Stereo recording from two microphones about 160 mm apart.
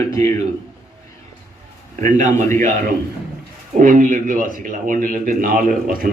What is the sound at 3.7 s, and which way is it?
A man's voice, 55° right (ahead or behind).